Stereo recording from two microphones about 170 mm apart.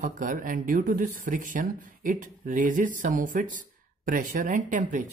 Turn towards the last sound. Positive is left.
turn(degrees=-50)  # may be behind; listen again after turning